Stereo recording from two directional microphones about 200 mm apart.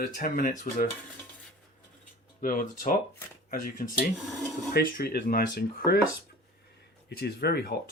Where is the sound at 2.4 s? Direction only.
40° left (ahead or behind).